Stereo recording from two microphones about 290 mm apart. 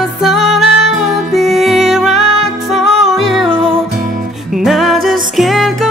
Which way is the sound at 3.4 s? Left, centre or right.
Centre.